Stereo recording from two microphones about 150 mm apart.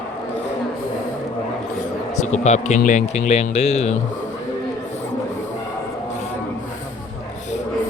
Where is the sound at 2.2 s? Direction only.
50° left (ahead or behind).